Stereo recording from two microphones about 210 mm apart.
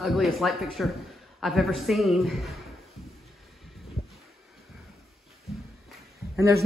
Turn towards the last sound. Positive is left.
turn(degrees=-15)  # may be behind; listen again after turning